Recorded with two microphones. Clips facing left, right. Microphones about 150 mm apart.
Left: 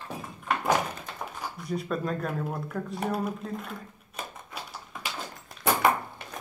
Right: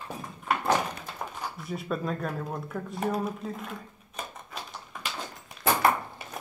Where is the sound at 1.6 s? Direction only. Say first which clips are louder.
Left 2 dB; centre (ahead or behind).